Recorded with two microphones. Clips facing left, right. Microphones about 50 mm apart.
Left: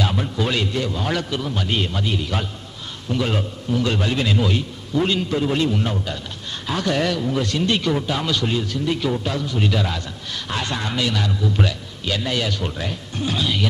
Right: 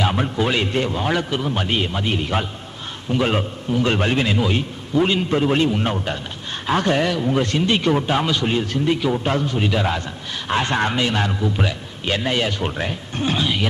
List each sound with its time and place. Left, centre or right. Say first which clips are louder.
0.0 s a man's voice: right 3 dB; right
1.0 s a man's voice: right 3 dB; right
2.0 s a man's voice: right 3 dB; right
5.3 s a man's voice: right 2 dB; right
7.0 s speech: right 1 dB; centre
7.3 s speech: right 2 dB; right
8.9 s speech: right 2 dB; centre
9.1 s speech: right 4 dB; right
9.6 s speech: right 1 dB; centre
9.8 s a man's voice: right 4 dB; right